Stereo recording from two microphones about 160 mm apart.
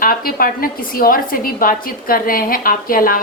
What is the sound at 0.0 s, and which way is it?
A woman's voice, 65° left (ahead or behind).